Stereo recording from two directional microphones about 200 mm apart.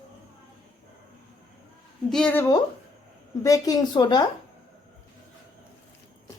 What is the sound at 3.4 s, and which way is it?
Speech, 15° left (ahead or behind).